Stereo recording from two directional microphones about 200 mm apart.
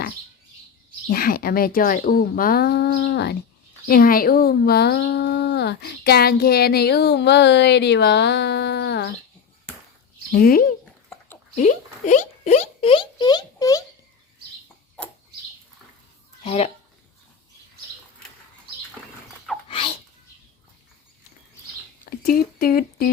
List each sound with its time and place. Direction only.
1.1 s speech: 45° left (ahead or behind)
3.8 s speech: 45° left (ahead or behind)
10.3 s speech: 45° left (ahead or behind); by 13.8 s 20° left (ahead or behind)
16.4 s speech: 30° left (ahead or behind)
19.6 s a sound: 30° left (ahead or behind)
22.0 s a sound: 45° left (ahead or behind)